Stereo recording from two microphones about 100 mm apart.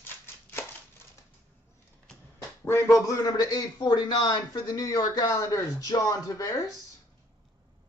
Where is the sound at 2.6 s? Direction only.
25° left (ahead or behind).